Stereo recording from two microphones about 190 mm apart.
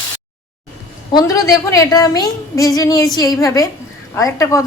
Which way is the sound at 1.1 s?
20° left (ahead or behind).